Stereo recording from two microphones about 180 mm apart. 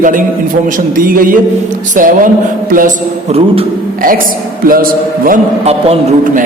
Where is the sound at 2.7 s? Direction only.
50° right (ahead or behind).